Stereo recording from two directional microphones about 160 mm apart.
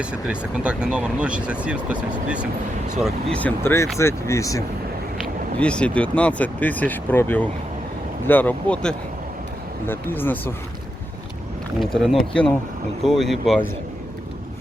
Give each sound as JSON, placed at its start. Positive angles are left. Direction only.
{"t": 0.0, "sound": "speech", "side_deg": -5}
{"t": 3.3, "sound": "speech", "side_deg": 10}
{"t": 5.1, "sound": "speech", "side_deg": 0}
{"t": 11.8, "sound": "speech", "side_deg": 0}